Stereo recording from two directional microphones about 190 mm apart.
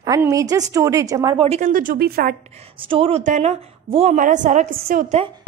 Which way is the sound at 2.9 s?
30° right (ahead or behind).